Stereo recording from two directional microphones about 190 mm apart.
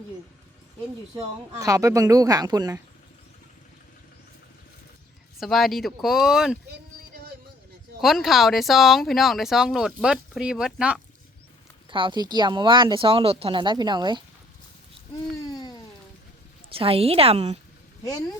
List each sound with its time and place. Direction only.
1.5 s speech: 15° right (ahead or behind)
5.4 s speech: centre (ahead or behind)
6.7 s a sound: 55° right (ahead or behind)
8.0 s speech: centre (ahead or behind)
11.9 s speech: 25° right (ahead or behind)
15.5 s a sound: 20° left (ahead or behind)
16.7 s a woman's voice: 30° right (ahead or behind)